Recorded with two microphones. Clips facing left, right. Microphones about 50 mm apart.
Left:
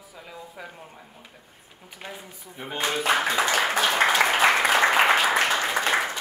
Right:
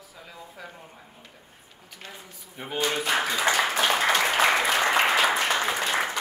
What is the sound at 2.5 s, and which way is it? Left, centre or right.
Speech, centre.